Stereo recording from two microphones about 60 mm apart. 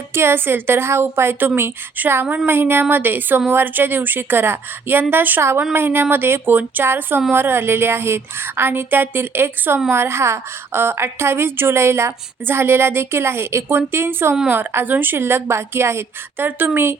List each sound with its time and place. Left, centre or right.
0.1 s a woman's voice: right
16.5 s speech: right